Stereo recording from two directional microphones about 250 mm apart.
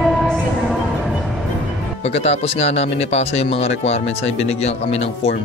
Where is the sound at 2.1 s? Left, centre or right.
Left.